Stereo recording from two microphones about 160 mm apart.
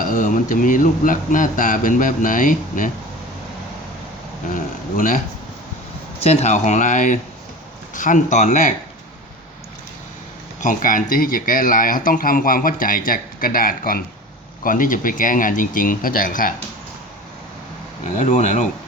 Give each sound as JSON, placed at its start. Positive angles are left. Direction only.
{"t": 0.0, "sound": "speech", "side_deg": 55}
{"t": 4.5, "sound": "speech", "side_deg": 55}
{"t": 6.2, "sound": "speech", "side_deg": 40}
{"t": 10.6, "sound": "speech", "side_deg": 55}
{"t": 18.2, "sound": "speech", "side_deg": 50}